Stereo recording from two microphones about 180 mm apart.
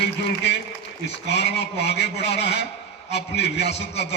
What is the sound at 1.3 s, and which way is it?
Speech, 70° left (ahead or behind).